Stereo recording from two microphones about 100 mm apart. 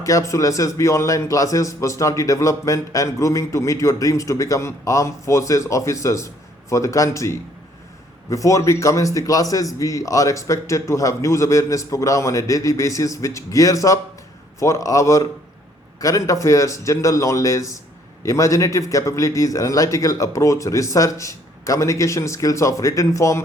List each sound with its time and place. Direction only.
0.0 s a man's voice: 35° left (ahead or behind)